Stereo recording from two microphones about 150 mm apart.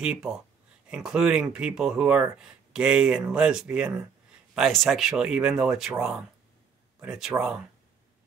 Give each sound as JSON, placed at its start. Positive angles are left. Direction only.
{"t": 0.0, "sound": "speech", "side_deg": -5}